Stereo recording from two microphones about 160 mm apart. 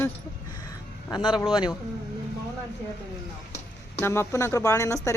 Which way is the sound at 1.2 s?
5° right (ahead or behind).